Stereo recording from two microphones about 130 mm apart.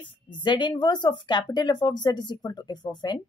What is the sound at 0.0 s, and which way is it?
Speech, 40° left (ahead or behind).